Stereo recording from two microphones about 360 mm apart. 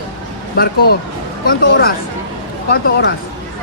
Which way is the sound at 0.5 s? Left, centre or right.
Left.